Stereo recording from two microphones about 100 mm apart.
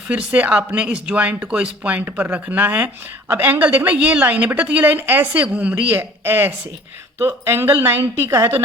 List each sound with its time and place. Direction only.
0.1 s a woman's voice: 15° right (ahead or behind)